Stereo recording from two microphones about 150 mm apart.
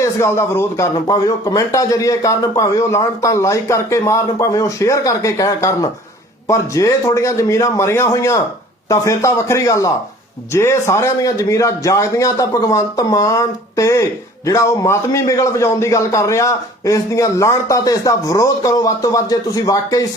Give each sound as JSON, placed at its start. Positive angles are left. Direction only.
{"t": 0.0, "sound": "a man's voice", "side_deg": 20}